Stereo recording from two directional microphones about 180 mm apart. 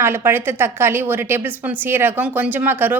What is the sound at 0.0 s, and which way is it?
A woman's voice, 15° right (ahead or behind).